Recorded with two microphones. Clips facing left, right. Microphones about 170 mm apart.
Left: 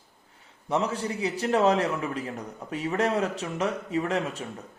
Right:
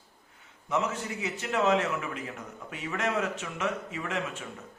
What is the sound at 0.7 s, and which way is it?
A man's voice, 35° left (ahead or behind).